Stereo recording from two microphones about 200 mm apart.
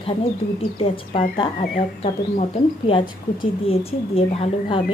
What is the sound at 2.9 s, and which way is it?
Speech, 25° left (ahead or behind).